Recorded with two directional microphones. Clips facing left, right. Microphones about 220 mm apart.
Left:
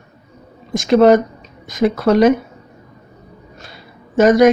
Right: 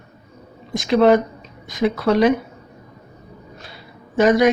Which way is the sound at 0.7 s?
45° left (ahead or behind).